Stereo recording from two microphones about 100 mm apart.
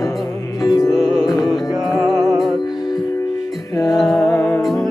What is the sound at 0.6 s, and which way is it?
Music, 35° left (ahead or behind).